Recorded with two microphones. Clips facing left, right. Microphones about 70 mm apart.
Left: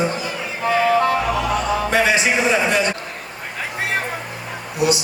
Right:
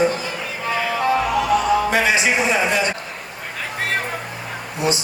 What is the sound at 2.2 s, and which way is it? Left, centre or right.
Speech, right.